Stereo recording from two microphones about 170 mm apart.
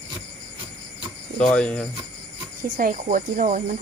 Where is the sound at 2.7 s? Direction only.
50° right (ahead or behind).